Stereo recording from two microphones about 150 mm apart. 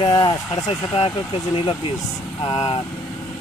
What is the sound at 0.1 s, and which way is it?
Speech, 25° left (ahead or behind).